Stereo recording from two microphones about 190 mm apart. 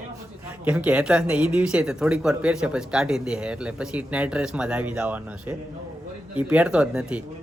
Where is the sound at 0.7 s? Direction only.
5° right (ahead or behind).